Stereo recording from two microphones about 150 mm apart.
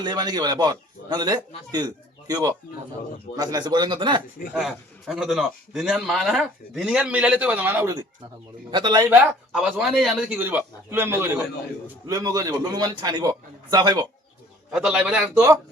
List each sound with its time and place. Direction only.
0.0 s a man's voice: 30° right (ahead or behind)
4.5 s a man's voice: centre (ahead or behind)
8.7 s a man's voice: 30° right (ahead or behind)
9.0 s a man's voice: 5° right (ahead or behind); by 14.0 s 25° right (ahead or behind)
14.7 s a man's voice: 5° right (ahead or behind)